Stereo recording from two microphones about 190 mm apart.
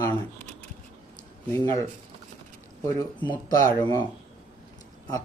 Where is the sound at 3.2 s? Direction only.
25° left (ahead or behind).